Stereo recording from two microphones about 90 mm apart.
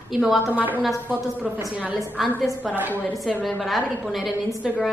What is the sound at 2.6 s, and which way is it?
Speech, 15° right (ahead or behind).